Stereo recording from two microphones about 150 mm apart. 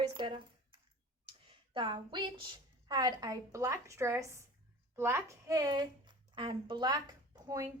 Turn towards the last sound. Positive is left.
turn(degrees=-25)  # may be behind; listen again after turning